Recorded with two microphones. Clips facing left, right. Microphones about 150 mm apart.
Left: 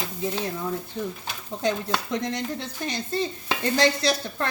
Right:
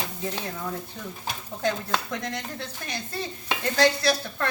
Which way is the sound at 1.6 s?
20° left (ahead or behind).